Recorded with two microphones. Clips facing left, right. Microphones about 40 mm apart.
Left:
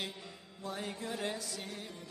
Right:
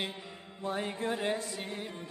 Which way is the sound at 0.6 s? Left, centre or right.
Right.